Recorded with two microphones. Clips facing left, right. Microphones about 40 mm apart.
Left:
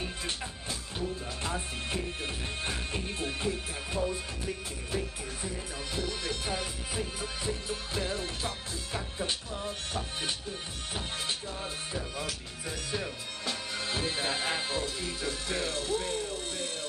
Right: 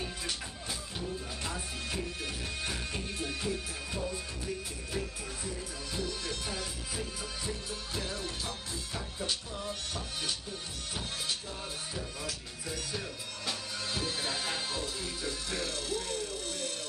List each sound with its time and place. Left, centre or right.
0.9 s music: left
5.9 s music: left
11.9 s music: left